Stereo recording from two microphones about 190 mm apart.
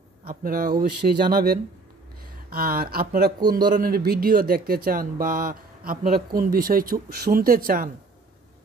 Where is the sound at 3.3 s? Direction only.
20° right (ahead or behind).